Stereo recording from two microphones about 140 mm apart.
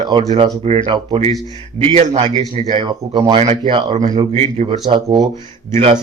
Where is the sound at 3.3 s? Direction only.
55° right (ahead or behind).